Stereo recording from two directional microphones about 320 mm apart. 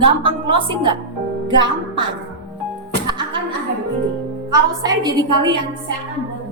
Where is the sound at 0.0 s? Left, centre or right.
Centre.